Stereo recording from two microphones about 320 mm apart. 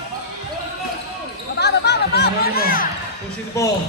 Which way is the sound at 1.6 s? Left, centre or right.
Left.